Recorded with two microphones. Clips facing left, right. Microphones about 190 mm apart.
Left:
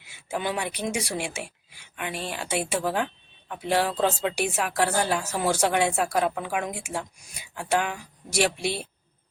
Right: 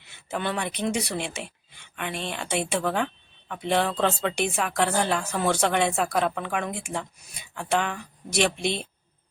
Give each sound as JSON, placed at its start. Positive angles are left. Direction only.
{"t": 0.0, "sound": "speech", "side_deg": 10}